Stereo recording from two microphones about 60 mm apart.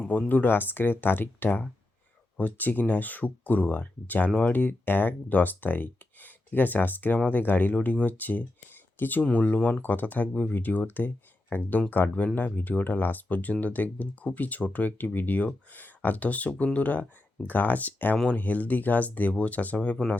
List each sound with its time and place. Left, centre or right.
0.1 s speech: left
9.8 s speech: left